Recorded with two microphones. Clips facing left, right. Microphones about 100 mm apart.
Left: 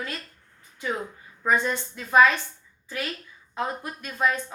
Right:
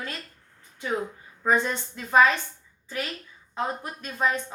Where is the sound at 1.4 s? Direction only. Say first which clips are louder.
Even; 30° right (ahead or behind).